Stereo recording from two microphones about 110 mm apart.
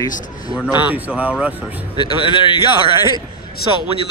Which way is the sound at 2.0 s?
45° left (ahead or behind).